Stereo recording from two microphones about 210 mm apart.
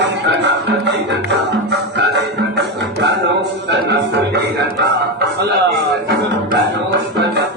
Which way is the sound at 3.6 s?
55° right (ahead or behind).